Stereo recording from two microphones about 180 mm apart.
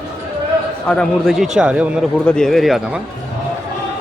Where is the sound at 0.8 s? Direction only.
5° left (ahead or behind).